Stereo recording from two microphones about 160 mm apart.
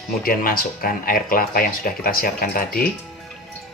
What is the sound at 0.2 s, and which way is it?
Speech, 65° left (ahead or behind).